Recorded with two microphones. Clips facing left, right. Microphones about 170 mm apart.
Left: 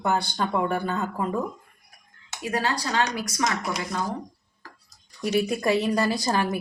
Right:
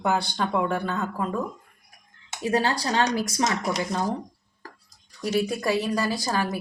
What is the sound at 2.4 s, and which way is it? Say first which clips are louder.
Speech: right 3 dB; 30° right (ahead or behind).